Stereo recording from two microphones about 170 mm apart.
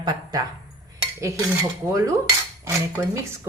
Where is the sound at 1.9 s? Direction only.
20° right (ahead or behind).